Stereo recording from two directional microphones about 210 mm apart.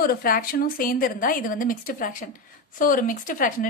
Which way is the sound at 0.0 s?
45° left (ahead or behind).